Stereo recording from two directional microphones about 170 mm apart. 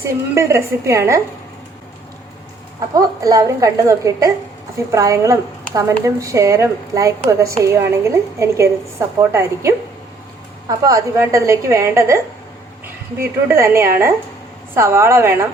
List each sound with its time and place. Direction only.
0.0 s a woman's voice: 15° right (ahead or behind)
2.9 s a woman's voice: 20° right (ahead or behind)